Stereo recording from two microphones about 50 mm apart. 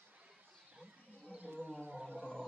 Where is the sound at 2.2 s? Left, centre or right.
Centre.